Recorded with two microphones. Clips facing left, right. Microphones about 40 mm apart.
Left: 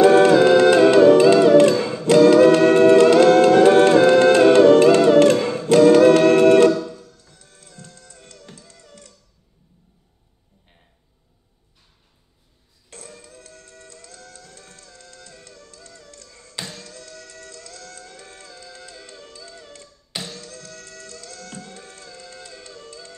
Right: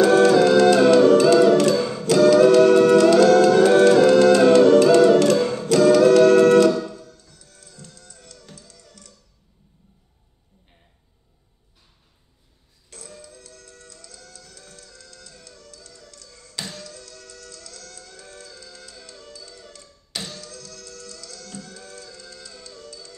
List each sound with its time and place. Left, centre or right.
0.0 s music: left
12.9 s music: left